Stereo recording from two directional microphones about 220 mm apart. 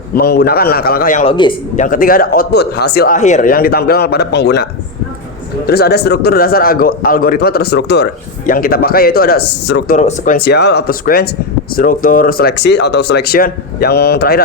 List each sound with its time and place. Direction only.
0.2 s speech: 45° left (ahead or behind)
1.2 s speech: 25° left (ahead or behind); by 14.4 s 45° left (ahead or behind)